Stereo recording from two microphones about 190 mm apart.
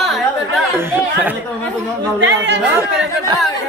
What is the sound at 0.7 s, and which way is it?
Chatter, 10° right (ahead or behind).